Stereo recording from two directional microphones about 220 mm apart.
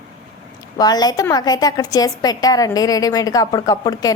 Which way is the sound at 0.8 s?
15° left (ahead or behind).